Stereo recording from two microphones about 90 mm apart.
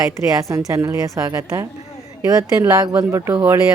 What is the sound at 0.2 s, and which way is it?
Speech, 35° right (ahead or behind).